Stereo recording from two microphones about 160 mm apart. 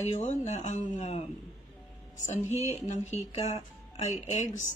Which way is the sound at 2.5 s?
45° left (ahead or behind).